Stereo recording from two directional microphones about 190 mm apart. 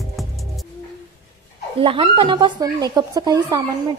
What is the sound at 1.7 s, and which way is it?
A woman's voice, 30° right (ahead or behind).